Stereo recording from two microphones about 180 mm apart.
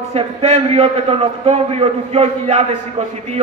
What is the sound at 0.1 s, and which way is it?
A man's voice, 35° right (ahead or behind).